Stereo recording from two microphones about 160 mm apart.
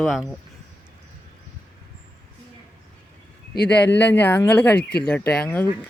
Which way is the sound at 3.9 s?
10° left (ahead or behind).